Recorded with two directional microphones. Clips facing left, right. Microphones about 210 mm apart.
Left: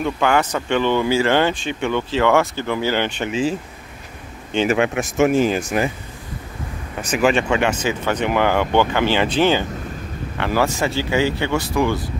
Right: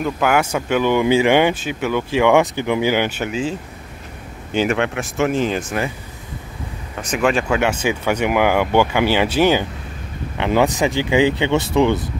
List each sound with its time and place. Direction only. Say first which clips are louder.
0.0 s speech: even; 5° right (ahead or behind)
4.6 s speech: left 2 dB; 10° left (ahead or behind)
7.0 s speech: left 1 dB; 5° left (ahead or behind); by 12.1 s 20° right (ahead or behind)